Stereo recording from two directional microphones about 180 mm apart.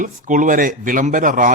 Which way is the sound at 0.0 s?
45° right (ahead or behind).